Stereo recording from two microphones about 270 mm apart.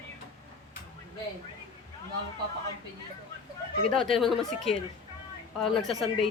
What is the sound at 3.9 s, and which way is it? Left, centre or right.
Speech, centre.